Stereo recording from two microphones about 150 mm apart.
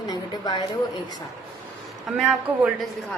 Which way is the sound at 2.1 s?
5° right (ahead or behind).